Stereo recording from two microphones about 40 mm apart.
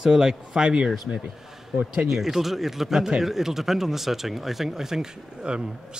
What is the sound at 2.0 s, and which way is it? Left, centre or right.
Speech, centre.